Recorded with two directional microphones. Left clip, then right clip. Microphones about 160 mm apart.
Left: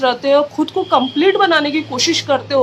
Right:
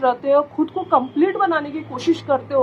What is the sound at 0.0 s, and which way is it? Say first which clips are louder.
Speech: left 3 dB; 20° left (ahead or behind).